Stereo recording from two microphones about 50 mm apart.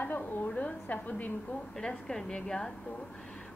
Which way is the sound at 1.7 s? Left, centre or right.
Centre.